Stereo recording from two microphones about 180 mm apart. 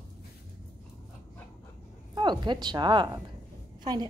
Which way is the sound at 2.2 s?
25° right (ahead or behind).